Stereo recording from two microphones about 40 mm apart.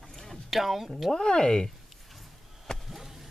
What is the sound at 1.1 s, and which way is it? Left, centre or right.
Speech, centre.